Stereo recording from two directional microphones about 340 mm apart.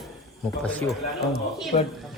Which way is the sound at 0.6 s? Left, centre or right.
Centre.